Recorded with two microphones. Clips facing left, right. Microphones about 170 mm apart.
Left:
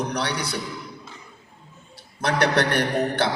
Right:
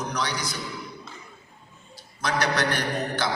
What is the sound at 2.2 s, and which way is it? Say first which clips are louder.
A man's voice: left 4 dB; 60° left (ahead or behind).